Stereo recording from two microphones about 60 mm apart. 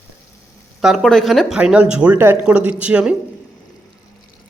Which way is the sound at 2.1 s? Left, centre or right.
Right.